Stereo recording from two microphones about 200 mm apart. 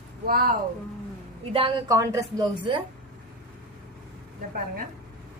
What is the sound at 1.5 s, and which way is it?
A woman's voice, 25° right (ahead or behind).